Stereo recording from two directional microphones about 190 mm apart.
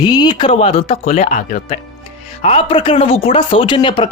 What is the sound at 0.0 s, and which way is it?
Speech, 25° left (ahead or behind).